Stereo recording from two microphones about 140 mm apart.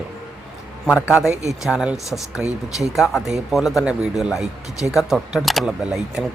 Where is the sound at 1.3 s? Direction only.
55° right (ahead or behind).